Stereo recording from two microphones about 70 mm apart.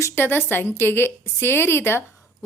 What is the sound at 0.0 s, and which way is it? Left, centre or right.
A woman's voice, left.